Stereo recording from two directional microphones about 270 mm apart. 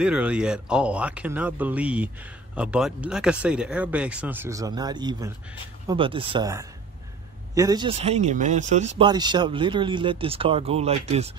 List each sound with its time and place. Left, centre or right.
0.0 s speech: centre; by 11.3 s right